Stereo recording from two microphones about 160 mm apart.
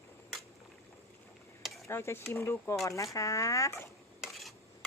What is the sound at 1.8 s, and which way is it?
Speech, 15° left (ahead or behind).